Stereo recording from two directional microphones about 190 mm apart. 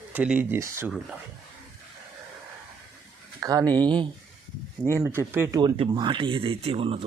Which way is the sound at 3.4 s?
20° right (ahead or behind).